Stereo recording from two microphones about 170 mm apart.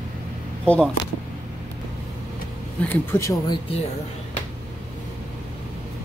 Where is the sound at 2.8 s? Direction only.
10° left (ahead or behind).